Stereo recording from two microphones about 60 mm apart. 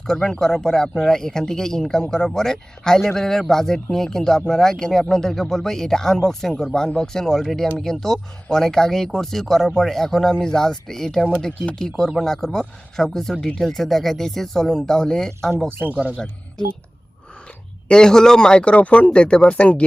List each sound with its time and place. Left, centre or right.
0.1 s speech: centre
15.7 s speech: right
16.1 s speech: centre
17.8 s speech: centre